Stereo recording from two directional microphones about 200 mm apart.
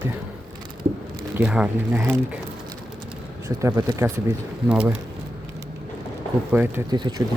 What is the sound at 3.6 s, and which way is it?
Speech, 15° right (ahead or behind).